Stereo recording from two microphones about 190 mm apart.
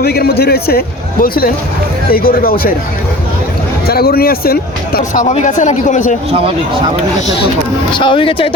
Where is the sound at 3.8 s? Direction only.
55° left (ahead or behind).